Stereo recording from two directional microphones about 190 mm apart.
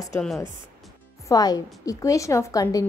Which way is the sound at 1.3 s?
20° left (ahead or behind).